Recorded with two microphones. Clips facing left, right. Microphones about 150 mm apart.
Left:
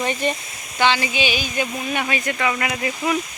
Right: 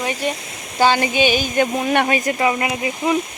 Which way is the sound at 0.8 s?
45° right (ahead or behind).